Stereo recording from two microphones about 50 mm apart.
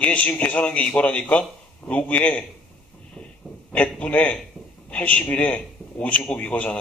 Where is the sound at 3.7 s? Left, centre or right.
Left.